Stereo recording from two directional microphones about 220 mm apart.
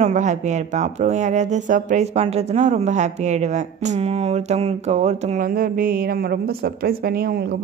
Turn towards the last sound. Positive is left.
turn(degrees=-45)  # may be behind; listen again after turning